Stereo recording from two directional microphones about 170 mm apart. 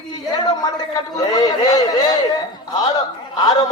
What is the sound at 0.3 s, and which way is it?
A man's voice, 25° left (ahead or behind).